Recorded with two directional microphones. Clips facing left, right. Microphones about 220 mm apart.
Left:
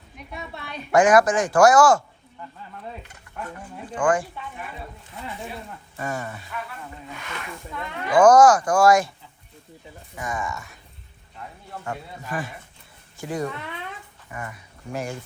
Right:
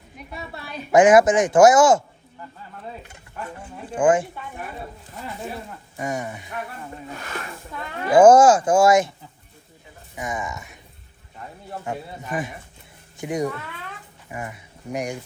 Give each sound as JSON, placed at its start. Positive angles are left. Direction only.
{"t": 0.2, "sound": "a sound", "side_deg": 0}
{"t": 0.9, "sound": "speech", "side_deg": -20}
{"t": 3.3, "sound": "speech", "side_deg": 0}
{"t": 3.9, "sound": "speech", "side_deg": -25}
{"t": 5.1, "sound": "speech", "side_deg": 0}
{"t": 6.0, "sound": "speech", "side_deg": -15}
{"t": 8.1, "sound": "speech", "side_deg": -25}
{"t": 10.2, "sound": "speech", "side_deg": -20}
{"t": 11.9, "sound": "speech", "side_deg": -20}